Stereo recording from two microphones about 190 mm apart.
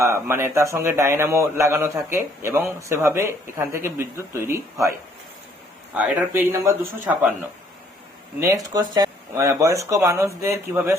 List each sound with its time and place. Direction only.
0.0 s a man's voice: 15° right (ahead or behind)
8.7 s a man's voice: 20° right (ahead or behind)